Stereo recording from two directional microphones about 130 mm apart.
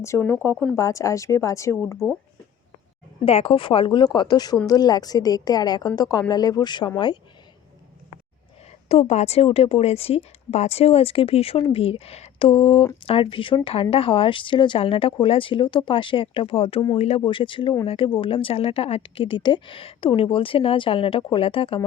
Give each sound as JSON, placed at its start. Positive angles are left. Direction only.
{"t": 0.0, "sound": "a woman's voice", "side_deg": 15}
{"t": 3.2, "sound": "a woman's voice", "side_deg": 50}
{"t": 8.9, "sound": "a woman's voice", "side_deg": 55}